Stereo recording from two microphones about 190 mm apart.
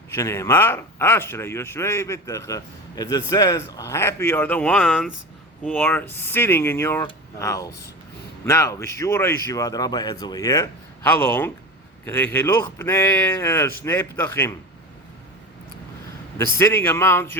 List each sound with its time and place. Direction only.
0.1 s speech: 15° left (ahead or behind)
16.4 s speech: 15° left (ahead or behind)